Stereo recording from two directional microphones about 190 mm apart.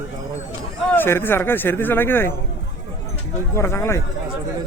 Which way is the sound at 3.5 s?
15° left (ahead or behind).